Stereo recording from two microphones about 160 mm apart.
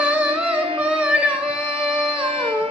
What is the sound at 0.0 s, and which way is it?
Music, 10° right (ahead or behind).